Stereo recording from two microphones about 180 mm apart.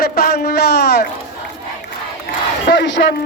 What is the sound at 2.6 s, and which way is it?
Speech, 75° left (ahead or behind).